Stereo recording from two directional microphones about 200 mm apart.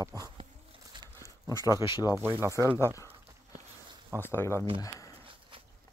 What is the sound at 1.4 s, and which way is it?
Speech, 15° left (ahead or behind).